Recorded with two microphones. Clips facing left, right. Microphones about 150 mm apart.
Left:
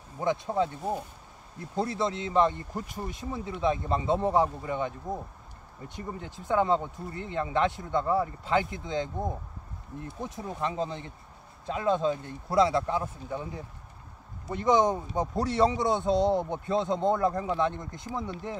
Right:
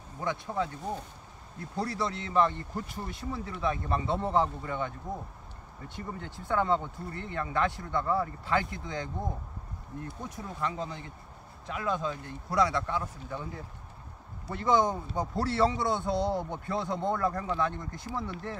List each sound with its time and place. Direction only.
0.2 s a man's voice: 25° left (ahead or behind)
1.8 s a man's voice: 20° left (ahead or behind)
14.5 s a man's voice: 20° left (ahead or behind)